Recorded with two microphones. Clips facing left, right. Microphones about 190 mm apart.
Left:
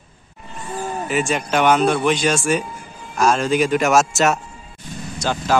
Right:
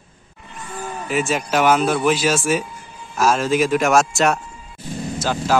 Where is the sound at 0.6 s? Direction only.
30° left (ahead or behind).